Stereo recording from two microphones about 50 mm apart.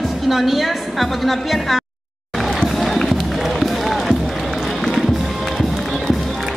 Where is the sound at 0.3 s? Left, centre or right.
Centre.